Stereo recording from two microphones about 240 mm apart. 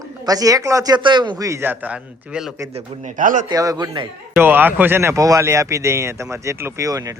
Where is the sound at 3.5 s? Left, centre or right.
Centre.